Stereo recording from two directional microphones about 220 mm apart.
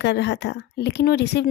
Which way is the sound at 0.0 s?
50° left (ahead or behind).